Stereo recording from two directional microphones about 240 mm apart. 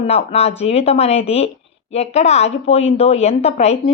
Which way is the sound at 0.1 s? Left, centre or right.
Left.